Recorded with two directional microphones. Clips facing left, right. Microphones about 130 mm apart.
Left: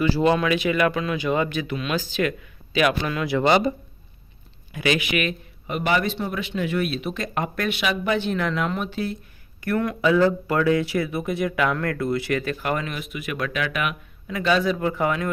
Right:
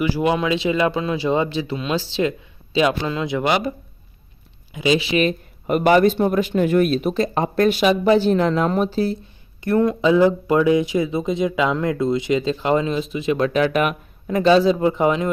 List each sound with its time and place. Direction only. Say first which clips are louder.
0.0 s speech: even; 15° right (ahead or behind)
3.4 s speech: left 3 dB; 5° right (ahead or behind)
4.7 s speech: right 4 dB; 20° right (ahead or behind)
5.6 s a man's voice: right 9 dB; 45° right (ahead or behind); by 15.3 s 20° right (ahead or behind)